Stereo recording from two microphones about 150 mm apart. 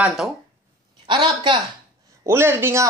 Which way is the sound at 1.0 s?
30° right (ahead or behind).